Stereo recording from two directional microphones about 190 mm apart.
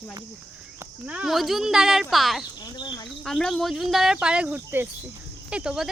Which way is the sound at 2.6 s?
20° left (ahead or behind).